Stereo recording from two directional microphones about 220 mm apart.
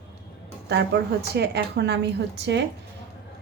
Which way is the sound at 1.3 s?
50° right (ahead or behind).